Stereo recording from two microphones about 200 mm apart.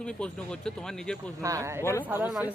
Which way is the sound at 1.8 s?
10° left (ahead or behind).